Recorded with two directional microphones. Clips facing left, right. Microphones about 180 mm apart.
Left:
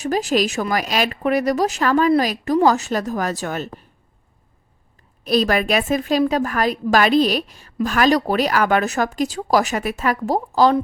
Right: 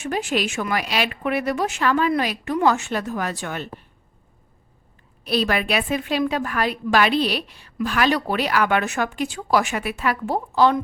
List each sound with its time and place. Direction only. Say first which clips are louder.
0.0 s a woman's voice: left 5 dB; 40° left (ahead or behind)
5.2 s a woman's voice: left 4 dB; 45° left (ahead or behind)